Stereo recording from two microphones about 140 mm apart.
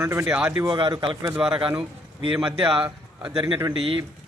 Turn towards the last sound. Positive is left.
turn(degrees=-40)  # may be behind; listen again after turning